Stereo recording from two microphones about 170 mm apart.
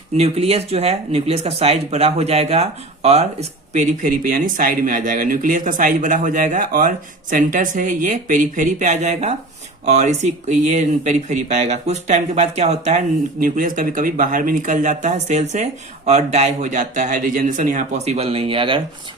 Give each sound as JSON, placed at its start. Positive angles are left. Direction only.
{"t": 0.2, "sound": "speech", "side_deg": -35}
{"t": 3.7, "sound": "speech", "side_deg": -50}
{"t": 13.4, "sound": "speech", "side_deg": -50}